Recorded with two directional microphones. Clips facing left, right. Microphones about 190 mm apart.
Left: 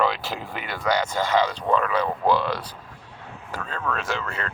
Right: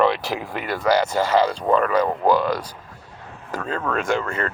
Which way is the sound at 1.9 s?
40° right (ahead or behind).